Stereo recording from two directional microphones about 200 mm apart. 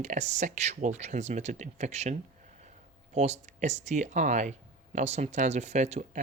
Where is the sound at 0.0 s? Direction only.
35° right (ahead or behind).